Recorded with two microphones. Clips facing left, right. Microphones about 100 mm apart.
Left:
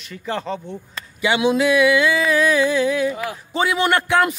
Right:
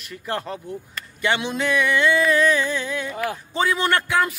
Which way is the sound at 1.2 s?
10° left (ahead or behind).